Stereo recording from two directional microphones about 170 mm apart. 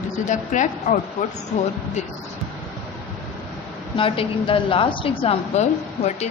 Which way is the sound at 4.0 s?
30° left (ahead or behind).